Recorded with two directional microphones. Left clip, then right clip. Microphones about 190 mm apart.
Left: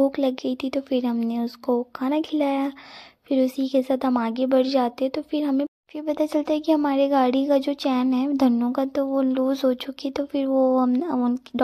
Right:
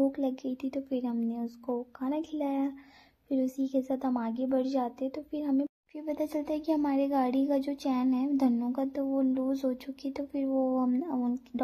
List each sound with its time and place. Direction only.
0.1 s a woman's voice: 25° left (ahead or behind)